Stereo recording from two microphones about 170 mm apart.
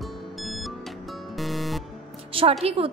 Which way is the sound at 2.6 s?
35° right (ahead or behind).